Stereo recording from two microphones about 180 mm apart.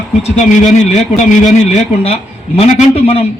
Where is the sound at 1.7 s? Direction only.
35° left (ahead or behind).